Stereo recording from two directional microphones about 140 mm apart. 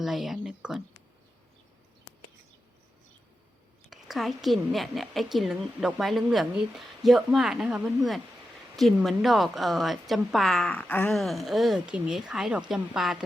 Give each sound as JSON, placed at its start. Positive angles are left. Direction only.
{"t": 0.0, "sound": "a woman's voice", "side_deg": 0}
{"t": 3.8, "sound": "a woman's voice", "side_deg": 0}